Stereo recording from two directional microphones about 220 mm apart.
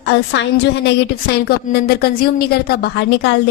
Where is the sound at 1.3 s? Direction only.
45° left (ahead or behind).